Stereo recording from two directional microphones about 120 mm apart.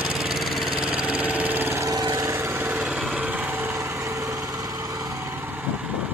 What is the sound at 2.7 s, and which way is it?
Light engine, 5° right (ahead or behind).